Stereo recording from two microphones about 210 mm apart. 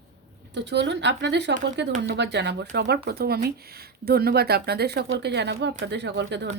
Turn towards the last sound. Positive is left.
turn(degrees=-55)  # may be behind; listen again after turning